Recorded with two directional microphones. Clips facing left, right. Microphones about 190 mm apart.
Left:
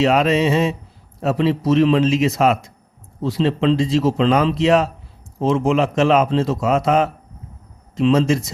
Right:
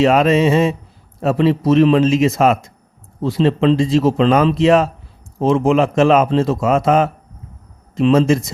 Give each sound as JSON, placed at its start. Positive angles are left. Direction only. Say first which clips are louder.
{"t": 0.0, "sound": "a man's voice", "louder": "right 3 dB", "side_deg": -50}